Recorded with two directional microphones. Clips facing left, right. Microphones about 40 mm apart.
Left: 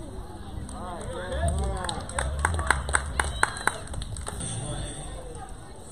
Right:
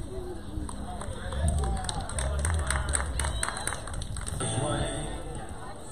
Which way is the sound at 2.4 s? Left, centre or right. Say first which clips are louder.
Left 11 dB; left.